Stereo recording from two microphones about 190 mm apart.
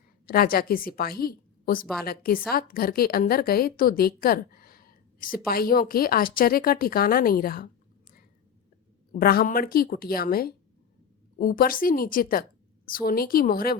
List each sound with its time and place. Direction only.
0.3 s a woman's voice: 50° left (ahead or behind)
9.1 s a woman's voice: 50° left (ahead or behind)